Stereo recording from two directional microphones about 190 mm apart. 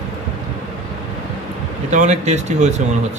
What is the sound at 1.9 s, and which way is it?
Speech, 40° right (ahead or behind).